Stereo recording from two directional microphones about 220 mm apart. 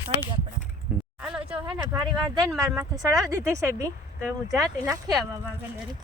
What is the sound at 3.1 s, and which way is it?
Speech, 15° right (ahead or behind).